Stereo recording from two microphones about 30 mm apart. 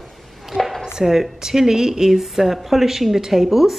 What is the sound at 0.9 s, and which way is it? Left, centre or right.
A woman's voice, centre.